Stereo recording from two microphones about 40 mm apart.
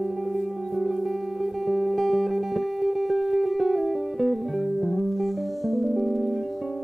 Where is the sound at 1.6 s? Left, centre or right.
Centre.